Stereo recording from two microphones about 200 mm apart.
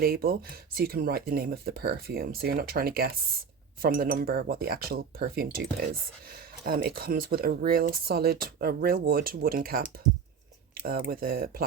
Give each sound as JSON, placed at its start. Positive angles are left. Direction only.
{"t": 0.0, "sound": "speech", "side_deg": -50}